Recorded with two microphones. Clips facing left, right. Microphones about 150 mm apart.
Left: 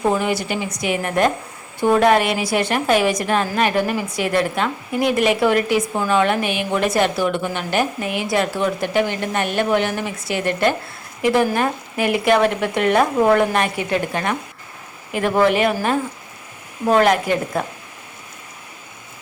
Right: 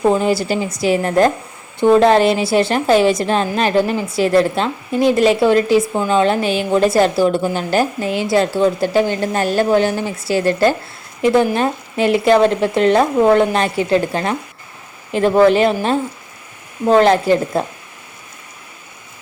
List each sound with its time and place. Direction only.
0.1 s a woman's voice: 35° right (ahead or behind)